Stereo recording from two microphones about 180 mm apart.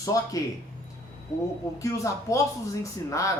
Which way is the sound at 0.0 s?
20° left (ahead or behind).